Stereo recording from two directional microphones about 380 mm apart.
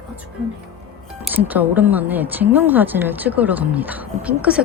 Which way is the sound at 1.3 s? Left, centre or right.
Centre.